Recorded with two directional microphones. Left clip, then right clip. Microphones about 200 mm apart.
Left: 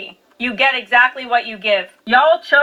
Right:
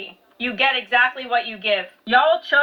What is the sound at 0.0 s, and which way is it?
Speech, 50° left (ahead or behind).